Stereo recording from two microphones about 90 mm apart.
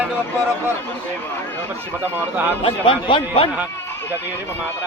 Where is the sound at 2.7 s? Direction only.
80° left.